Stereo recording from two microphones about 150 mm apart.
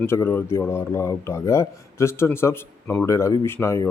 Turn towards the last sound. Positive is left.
turn(degrees=15)  # may be behind; listen again after turning